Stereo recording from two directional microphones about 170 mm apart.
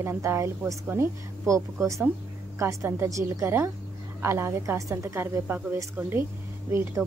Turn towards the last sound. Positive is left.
turn(degrees=-15)  # may be behind; listen again after turning